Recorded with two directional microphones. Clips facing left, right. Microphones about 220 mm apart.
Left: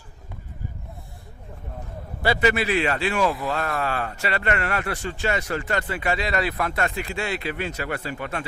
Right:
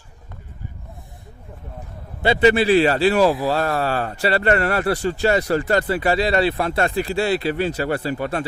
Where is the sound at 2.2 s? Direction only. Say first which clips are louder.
Right 6 dB; 25° right (ahead or behind).